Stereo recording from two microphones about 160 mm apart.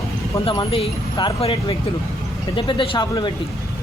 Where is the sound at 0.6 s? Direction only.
35° left (ahead or behind).